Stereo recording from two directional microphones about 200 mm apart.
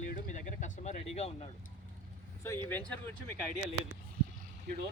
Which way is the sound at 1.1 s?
30° left (ahead or behind).